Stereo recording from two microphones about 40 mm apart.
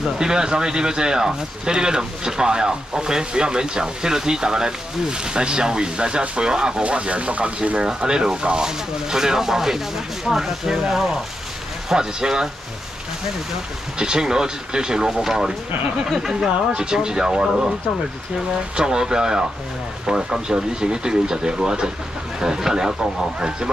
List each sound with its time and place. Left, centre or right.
0.2 s speech: centre
7.8 s speech: right
13.9 s speech: right
18.8 s speech: centre